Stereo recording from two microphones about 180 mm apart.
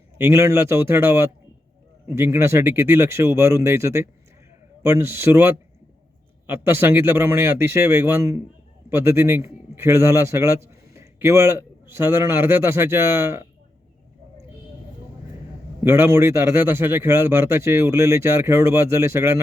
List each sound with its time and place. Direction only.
0.2 s a man's voice: 15° right (ahead or behind)
6.5 s a man's voice: 10° right (ahead or behind)
15.8 s a man's voice: 15° right (ahead or behind)